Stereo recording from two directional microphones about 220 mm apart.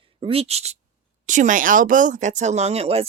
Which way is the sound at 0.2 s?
25° right (ahead or behind).